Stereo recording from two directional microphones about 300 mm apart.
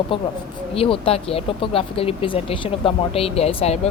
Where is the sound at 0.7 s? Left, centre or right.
Centre.